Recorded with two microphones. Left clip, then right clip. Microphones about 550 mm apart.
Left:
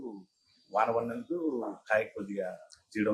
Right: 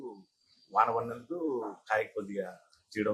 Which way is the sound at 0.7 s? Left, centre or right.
Right.